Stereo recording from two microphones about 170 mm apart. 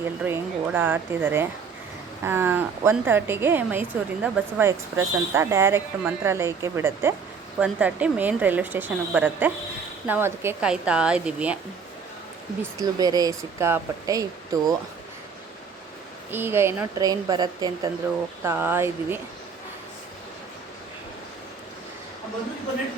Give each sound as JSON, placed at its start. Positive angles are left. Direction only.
{"t": 0.2, "sound": "a woman's voice", "side_deg": -10}
{"t": 12.8, "sound": "speech", "side_deg": -20}
{"t": 16.3, "sound": "a woman's voice", "side_deg": -15}
{"t": 18.4, "sound": "a woman's voice", "side_deg": -15}